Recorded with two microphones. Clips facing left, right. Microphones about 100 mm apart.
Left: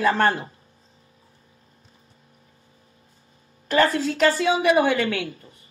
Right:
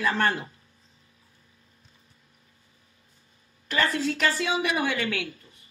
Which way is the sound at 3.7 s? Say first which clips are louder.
Left 6 dB; 35° left (ahead or behind).